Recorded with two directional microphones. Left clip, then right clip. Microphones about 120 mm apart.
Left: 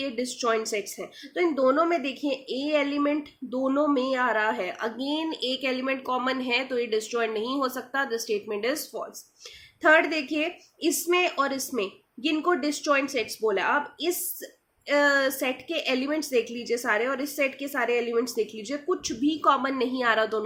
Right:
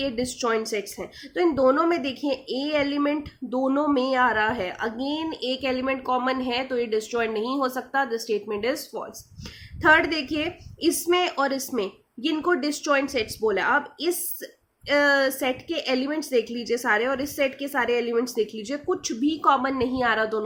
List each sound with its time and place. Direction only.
0.0 s speech: 40° right (ahead or behind)